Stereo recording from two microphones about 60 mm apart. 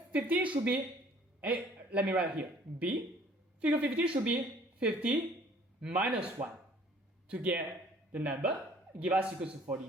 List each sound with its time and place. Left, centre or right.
0.1 s a man's voice: right